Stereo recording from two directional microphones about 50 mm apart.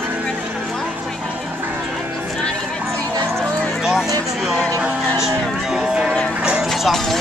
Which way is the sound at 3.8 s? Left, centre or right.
Centre.